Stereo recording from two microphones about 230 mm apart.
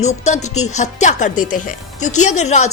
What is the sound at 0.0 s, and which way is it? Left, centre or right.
A woman's voice, left.